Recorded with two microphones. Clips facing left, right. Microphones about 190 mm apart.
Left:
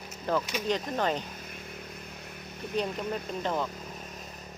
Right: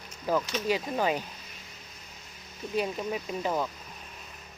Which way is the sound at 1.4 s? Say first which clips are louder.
Left 7 dB; 55° left (ahead or behind).